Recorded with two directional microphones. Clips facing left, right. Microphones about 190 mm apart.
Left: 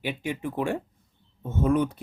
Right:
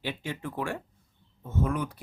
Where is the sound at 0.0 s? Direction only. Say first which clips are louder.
Left 4 dB; 15° left (ahead or behind).